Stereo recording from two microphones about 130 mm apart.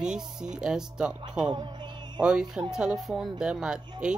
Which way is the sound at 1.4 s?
35° right (ahead or behind).